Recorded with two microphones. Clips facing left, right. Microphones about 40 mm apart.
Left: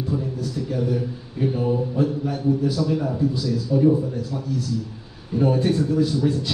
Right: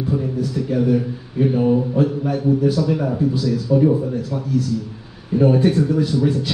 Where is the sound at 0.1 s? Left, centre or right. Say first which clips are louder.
Right 6 dB; right.